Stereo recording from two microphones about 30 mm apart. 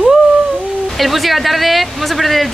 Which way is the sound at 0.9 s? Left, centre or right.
Centre.